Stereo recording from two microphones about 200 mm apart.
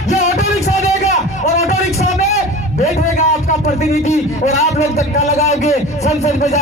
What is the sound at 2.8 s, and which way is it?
A man's voice, 35° left (ahead or behind).